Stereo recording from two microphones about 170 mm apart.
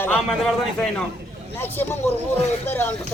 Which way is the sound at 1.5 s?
10° left (ahead or behind).